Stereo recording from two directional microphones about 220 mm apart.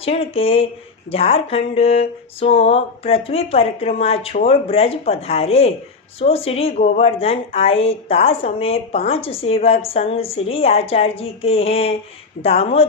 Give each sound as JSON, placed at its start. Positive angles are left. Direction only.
{"t": 0.0, "sound": "speech", "side_deg": 25}